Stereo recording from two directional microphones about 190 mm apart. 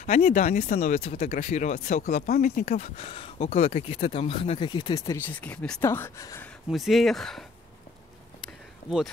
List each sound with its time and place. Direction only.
0.2 s speech: 40° left (ahead or behind)
3.0 s speech: 30° left (ahead or behind)
6.7 s speech: centre (ahead or behind)